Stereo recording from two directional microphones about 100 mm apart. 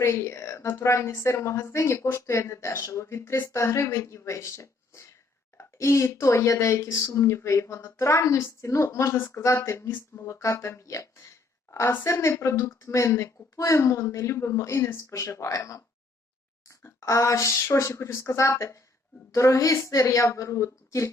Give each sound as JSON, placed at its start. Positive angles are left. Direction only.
{"t": 0.0, "sound": "a woman's voice", "side_deg": 25}